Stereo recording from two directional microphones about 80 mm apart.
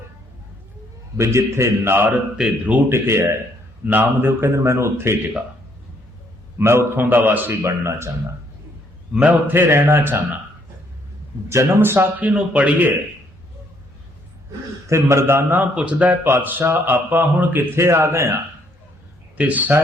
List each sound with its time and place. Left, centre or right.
1.1 s speech: right
2.4 s speech: centre
2.9 s speech: right
3.8 s speech: right
6.6 s speech: right
7.6 s speech: right
9.2 s speech: right
11.4 s speech: right
12.3 s a man's voice: centre
14.8 s speech: right
19.4 s speech: centre